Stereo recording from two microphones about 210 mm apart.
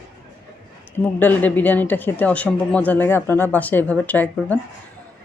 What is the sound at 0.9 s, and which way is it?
Speech, 10° left (ahead or behind).